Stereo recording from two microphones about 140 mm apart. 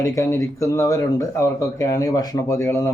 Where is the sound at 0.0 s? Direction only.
20° left (ahead or behind).